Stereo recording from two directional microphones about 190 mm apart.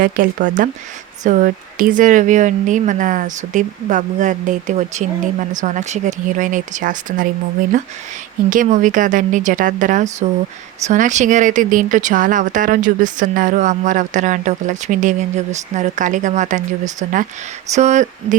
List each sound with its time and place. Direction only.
0.0 s speech: 45° right (ahead or behind)
8.4 s speech: 45° right (ahead or behind)